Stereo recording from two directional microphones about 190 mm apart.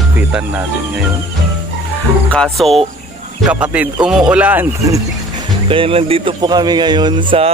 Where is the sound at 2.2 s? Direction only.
5° left (ahead or behind); by 5.0 s 15° right (ahead or behind).